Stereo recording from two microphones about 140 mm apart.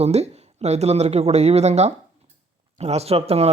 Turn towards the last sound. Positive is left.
turn(degrees=-45)  # may be behind; listen again after turning